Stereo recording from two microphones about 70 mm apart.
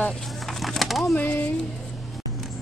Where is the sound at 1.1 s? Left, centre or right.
Left.